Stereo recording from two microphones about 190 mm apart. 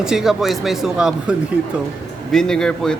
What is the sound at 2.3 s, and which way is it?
Speech, 5° left (ahead or behind).